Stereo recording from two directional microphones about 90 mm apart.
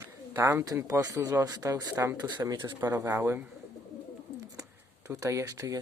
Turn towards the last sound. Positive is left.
turn(degrees=-40)  # may be behind; listen again after turning